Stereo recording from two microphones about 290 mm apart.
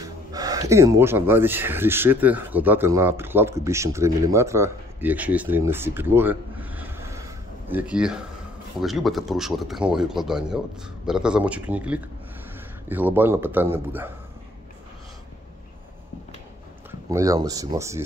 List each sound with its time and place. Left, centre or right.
0.0 s a man's voice: centre
17.1 s a man's voice: centre